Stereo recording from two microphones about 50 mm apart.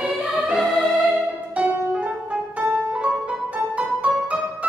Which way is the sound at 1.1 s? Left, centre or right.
Right.